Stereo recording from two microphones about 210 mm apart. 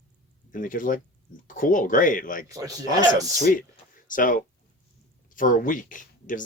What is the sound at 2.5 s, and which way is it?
Speech, 15° right (ahead or behind).